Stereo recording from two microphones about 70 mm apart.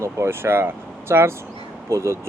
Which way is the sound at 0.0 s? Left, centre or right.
Right.